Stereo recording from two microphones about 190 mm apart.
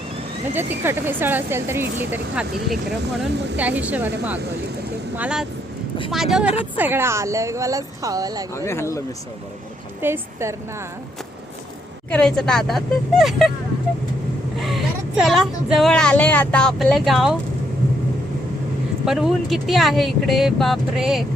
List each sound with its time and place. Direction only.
0.5 s speech: 10° right (ahead or behind)
8.5 s speech: 15° left (ahead or behind)
10.0 s speech: 10° right (ahead or behind)
12.1 s speech: 5° left (ahead or behind)
14.6 s speech: centre (ahead or behind)
19.0 s speech: centre (ahead or behind)